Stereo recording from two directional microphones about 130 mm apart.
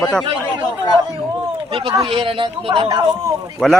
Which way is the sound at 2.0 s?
45° right (ahead or behind).